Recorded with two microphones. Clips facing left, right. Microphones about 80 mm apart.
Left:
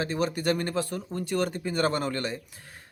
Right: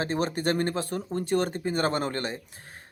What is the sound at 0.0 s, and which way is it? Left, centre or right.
Speech, right.